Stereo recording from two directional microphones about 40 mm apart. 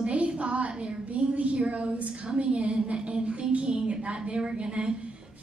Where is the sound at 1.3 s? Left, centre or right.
Right.